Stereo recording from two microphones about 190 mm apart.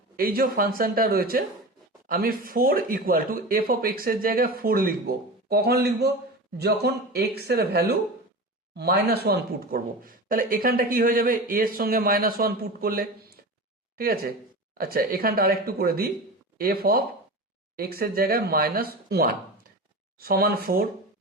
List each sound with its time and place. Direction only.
0.2 s speech: 50° right (ahead or behind)